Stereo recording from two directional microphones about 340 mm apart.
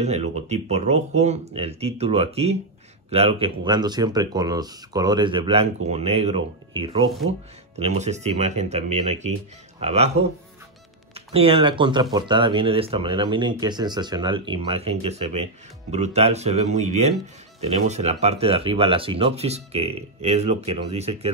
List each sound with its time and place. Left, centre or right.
0.0 s speech: centre
11.1 s speech: centre